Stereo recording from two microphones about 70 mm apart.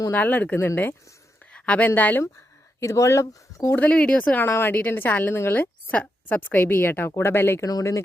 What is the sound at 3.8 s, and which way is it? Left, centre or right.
Speech, centre.